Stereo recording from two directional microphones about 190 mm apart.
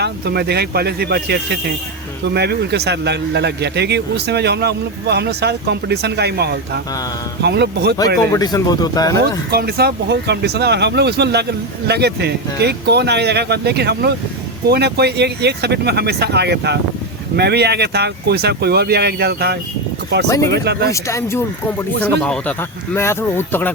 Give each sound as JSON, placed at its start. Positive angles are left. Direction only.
{"t": 0.0, "sound": "speech", "side_deg": -60}
{"t": 8.2, "sound": "speech", "side_deg": 15}
{"t": 9.5, "sound": "speech", "side_deg": -55}
{"t": 20.2, "sound": "speech", "side_deg": 15}
{"t": 20.5, "sound": "speech", "side_deg": -60}
{"t": 20.9, "sound": "speech", "side_deg": 15}